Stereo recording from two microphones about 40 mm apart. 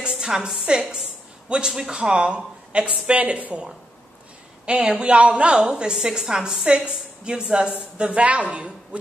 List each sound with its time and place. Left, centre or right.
0.1 s a sound: centre
0.6 s a woman's voice: centre
3.1 s a woman's voice: right
4.6 s speech: right
6.1 s a woman's voice: centre
6.4 s speech: right
8.1 s a woman's voice: right